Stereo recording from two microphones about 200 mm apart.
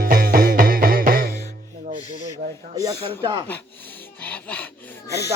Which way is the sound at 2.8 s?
20° right (ahead or behind).